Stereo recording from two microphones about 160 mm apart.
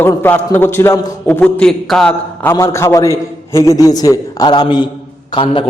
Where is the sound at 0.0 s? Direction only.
15° left (ahead or behind).